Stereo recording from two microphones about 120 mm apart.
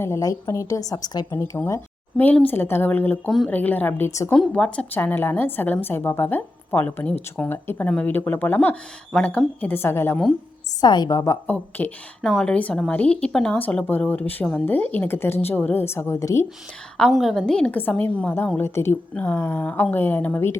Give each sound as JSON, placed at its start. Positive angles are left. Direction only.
{"t": 0.0, "sound": "a woman's voice", "side_deg": 25}
{"t": 2.1, "sound": "a woman's voice", "side_deg": 15}
{"t": 3.2, "sound": "speech", "side_deg": 5}
{"t": 3.5, "sound": "a woman's voice", "side_deg": 15}
{"t": 4.3, "sound": "a woman's voice", "side_deg": 10}
{"t": 10.8, "sound": "a woman's voice", "side_deg": 35}
{"t": 11.4, "sound": "a woman's voice", "side_deg": 10}
{"t": 17.0, "sound": "a woman's voice", "side_deg": 0}